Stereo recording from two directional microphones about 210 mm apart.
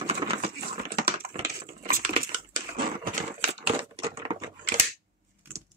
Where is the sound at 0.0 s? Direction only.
30° right (ahead or behind).